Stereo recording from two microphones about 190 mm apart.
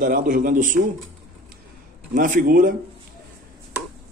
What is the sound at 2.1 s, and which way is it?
Speech, 45° right (ahead or behind).